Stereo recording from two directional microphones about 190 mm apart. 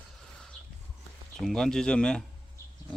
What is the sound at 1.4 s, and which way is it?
Speech, 5° left (ahead or behind).